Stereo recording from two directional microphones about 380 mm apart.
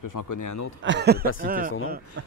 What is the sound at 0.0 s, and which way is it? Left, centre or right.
Speech, left.